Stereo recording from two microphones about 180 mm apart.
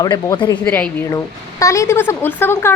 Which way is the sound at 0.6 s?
10° left (ahead or behind).